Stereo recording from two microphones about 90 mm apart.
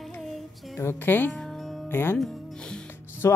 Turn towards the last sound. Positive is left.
turn(degrees=35)  # may be behind; listen again after turning